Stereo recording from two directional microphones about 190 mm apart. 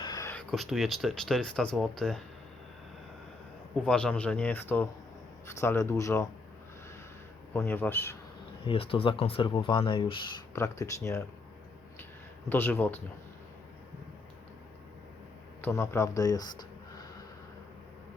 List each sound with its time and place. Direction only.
0.0 s a sound: 20° left (ahead or behind)
0.5 s speech: centre (ahead or behind)
3.8 s speech: 5° left (ahead or behind)
7.5 s speech: 10° left (ahead or behind)
8.6 s speech: 30° left (ahead or behind)
10.5 s speech: 15° left (ahead or behind)
12.5 s speech: 10° left (ahead or behind)
15.6 s speech: 15° left (ahead or behind)